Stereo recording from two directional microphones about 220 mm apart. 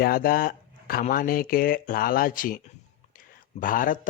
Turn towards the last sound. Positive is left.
turn(degrees=40)  # may be behind; listen again after turning